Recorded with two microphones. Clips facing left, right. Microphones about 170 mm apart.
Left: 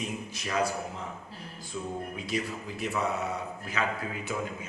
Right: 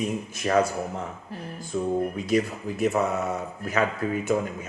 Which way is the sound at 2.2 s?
45° right (ahead or behind).